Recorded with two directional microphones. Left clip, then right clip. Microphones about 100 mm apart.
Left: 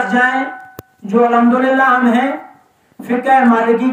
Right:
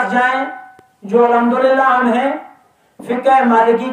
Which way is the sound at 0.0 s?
35° right (ahead or behind).